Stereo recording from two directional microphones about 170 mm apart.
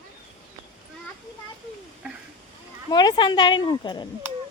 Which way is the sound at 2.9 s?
25° left (ahead or behind).